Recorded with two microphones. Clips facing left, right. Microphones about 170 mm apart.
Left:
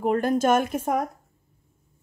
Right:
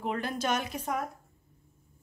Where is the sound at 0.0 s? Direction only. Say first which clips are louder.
Left 10 dB; 45° left (ahead or behind).